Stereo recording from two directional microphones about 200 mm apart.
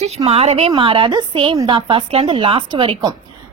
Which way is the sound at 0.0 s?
30° right (ahead or behind).